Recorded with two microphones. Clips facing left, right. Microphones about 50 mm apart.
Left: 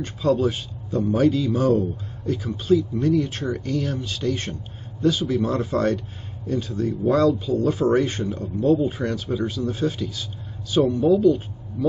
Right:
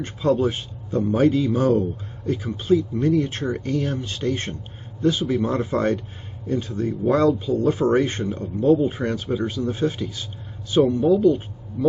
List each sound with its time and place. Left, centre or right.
0.0 s speech: right